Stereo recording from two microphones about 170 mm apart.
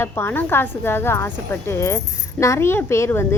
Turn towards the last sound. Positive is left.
turn(degrees=15)  # may be behind; listen again after turning